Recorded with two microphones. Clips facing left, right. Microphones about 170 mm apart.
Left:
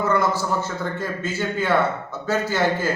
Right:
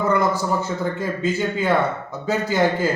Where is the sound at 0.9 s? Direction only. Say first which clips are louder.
Right 4 dB; 15° right (ahead or behind).